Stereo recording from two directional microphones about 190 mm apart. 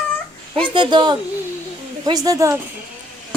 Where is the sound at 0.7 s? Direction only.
25° right (ahead or behind).